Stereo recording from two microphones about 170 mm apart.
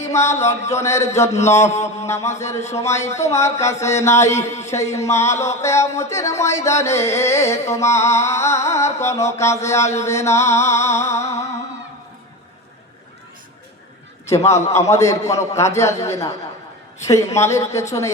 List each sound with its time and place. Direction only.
0.1 s a sound: 15° left (ahead or behind)
0.4 s music: 15° left (ahead or behind)
14.3 s music: 15° left (ahead or behind)
16.0 s a man's voice: 20° left (ahead or behind)
17.1 s music: 15° left (ahead or behind)